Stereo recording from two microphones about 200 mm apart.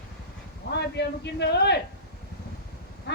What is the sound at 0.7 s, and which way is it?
A man's voice, 60° left (ahead or behind).